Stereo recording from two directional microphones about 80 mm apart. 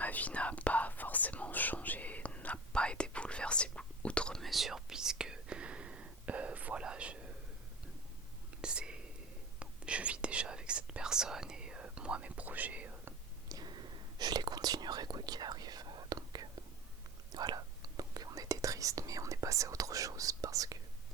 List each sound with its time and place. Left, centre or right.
0.0 s whispering: centre
8.6 s whispering: centre
13.5 s whispering: right